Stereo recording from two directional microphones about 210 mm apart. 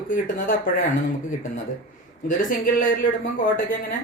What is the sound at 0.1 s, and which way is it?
Speech, 40° left (ahead or behind).